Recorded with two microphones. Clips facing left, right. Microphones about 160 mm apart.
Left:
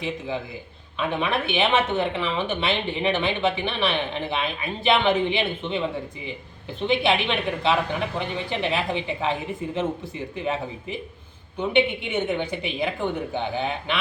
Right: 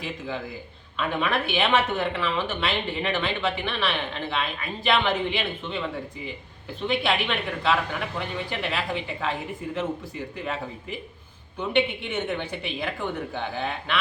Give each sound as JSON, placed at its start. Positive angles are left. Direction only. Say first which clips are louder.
{"t": 0.9, "sound": "speech", "louder": "left 1 dB", "side_deg": 20}